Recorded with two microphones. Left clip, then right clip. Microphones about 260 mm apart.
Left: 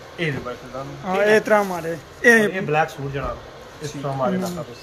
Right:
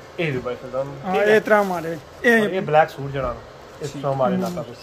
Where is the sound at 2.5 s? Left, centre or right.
Right.